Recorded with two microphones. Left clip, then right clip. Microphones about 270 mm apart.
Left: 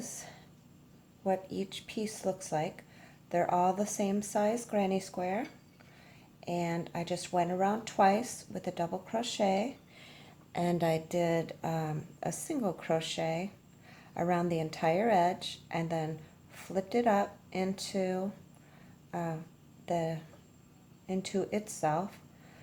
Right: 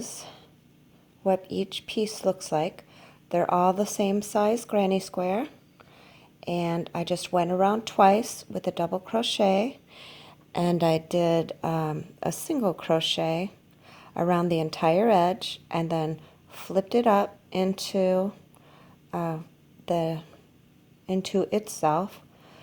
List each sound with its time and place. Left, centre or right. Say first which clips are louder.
1.2 s speech: right 7 dB; right
6.4 s speech: right 6 dB; right
21.8 s a sound: right 6 dB; right